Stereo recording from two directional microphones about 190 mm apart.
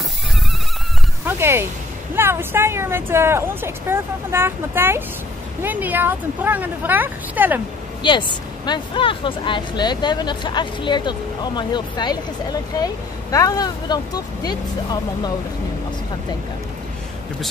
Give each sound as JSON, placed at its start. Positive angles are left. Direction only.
{"t": 1.2, "sound": "a sound", "side_deg": -10}
{"t": 2.1, "sound": "speech", "side_deg": -10}
{"t": 8.0, "sound": "speech", "side_deg": 25}